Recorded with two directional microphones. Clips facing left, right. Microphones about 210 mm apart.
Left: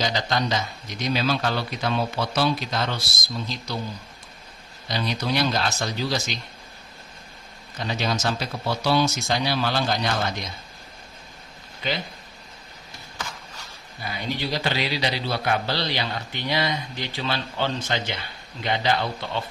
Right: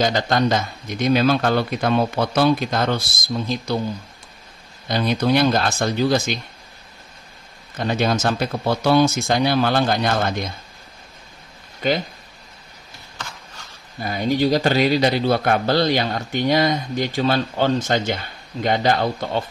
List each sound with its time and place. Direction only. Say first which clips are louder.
0.0 s speech: right 6 dB; 50° right (ahead or behind)
4.8 s speech: right 7 dB; 50° right (ahead or behind)
7.7 s speech: right 7 dB; 55° right (ahead or behind)
11.8 s speech: right 8 dB; 45° right (ahead or behind)
14.0 s speech: right 10 dB; 45° right (ahead or behind)